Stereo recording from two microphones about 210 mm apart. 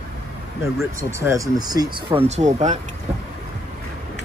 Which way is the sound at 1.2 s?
15° right (ahead or behind).